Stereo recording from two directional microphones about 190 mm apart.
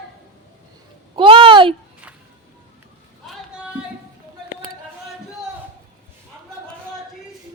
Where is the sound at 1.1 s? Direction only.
25° right (ahead or behind).